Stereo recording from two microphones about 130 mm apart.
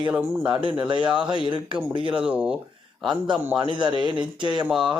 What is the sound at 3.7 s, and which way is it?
Speech, 40° right (ahead or behind).